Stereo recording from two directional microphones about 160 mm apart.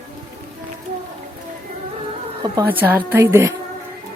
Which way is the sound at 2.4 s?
15° right (ahead or behind).